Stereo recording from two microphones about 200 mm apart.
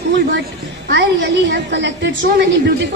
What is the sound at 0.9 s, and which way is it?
A woman's voice, 60° right (ahead or behind).